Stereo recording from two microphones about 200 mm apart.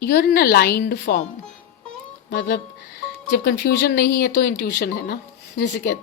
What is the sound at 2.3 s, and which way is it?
Speech, 55° left (ahead or behind).